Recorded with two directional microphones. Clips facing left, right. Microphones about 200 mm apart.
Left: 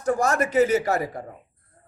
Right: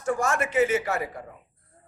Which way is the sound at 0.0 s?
40° left (ahead or behind).